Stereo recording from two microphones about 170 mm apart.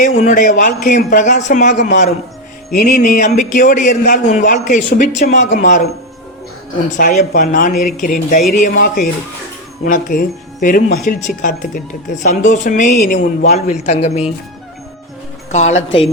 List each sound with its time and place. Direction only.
0.0 s a man's voice: 45° left (ahead or behind)
6.9 s a man's voice: 45° left (ahead or behind)
15.5 s speech: 40° left (ahead or behind)